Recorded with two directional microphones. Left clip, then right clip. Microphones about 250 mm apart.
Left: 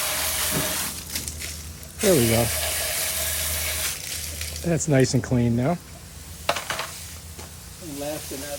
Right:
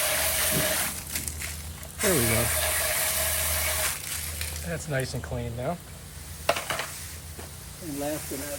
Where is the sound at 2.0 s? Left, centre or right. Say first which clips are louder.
Left 5 dB; centre.